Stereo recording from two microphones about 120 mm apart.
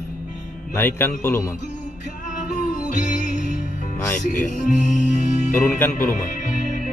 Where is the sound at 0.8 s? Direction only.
20° left (ahead or behind).